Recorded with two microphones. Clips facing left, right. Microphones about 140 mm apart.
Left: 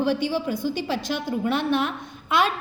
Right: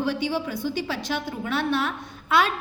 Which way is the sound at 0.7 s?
50° left (ahead or behind).